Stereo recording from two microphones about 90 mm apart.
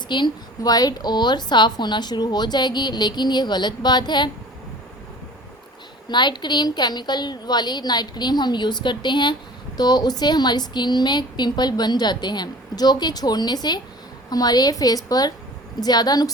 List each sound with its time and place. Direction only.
0.1 s a woman's voice: 55° left (ahead or behind)
6.1 s a woman's voice: 55° left (ahead or behind)